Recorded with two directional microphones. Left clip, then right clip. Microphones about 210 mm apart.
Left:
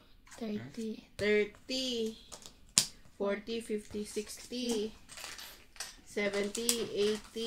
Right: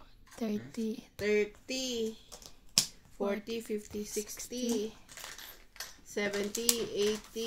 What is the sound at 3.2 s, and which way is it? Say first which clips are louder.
Speech: even; 10° right (ahead or behind).